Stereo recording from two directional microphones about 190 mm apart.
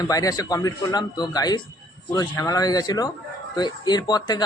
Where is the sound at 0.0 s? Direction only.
20° left (ahead or behind).